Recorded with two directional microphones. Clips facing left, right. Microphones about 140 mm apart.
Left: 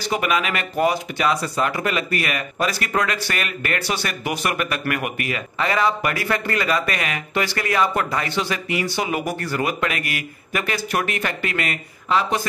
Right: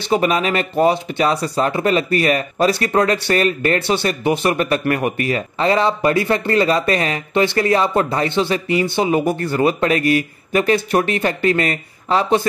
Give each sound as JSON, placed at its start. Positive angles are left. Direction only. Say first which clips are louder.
{"t": 0.0, "sound": "speech", "louder": "right 5 dB", "side_deg": -30}